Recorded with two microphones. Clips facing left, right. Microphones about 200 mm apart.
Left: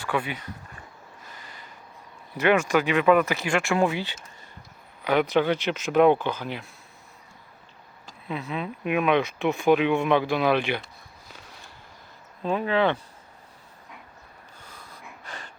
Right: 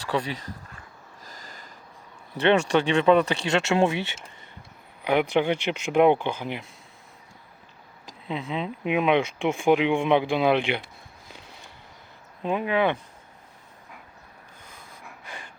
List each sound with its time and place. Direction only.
0.1 s speech: 35° right (ahead or behind)
1.2 s a sound: 40° right (ahead or behind)
2.4 s speech: 30° right (ahead or behind)
5.0 s speech: 15° right (ahead or behind)
8.3 s speech: 20° right (ahead or behind)
12.4 s speech: 15° right (ahead or behind)
15.2 s pant: 10° right (ahead or behind)